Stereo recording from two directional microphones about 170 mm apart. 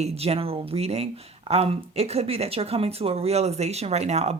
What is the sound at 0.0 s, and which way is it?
Speech, 35° right (ahead or behind).